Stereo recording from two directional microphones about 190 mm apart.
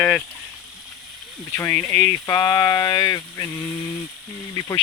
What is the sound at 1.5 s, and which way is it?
Speech, 10° left (ahead or behind).